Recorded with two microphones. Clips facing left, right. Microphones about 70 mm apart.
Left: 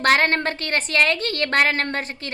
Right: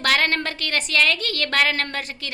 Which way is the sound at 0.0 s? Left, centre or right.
Left.